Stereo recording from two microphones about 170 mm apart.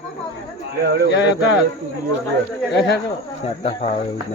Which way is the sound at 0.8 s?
65° right (ahead or behind).